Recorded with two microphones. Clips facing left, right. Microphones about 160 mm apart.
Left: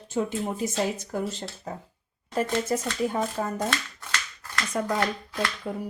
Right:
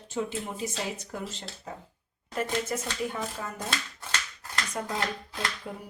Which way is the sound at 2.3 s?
35° left (ahead or behind).